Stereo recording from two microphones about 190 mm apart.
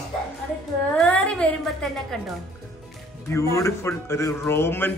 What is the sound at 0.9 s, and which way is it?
A woman's voice, 5° left (ahead or behind).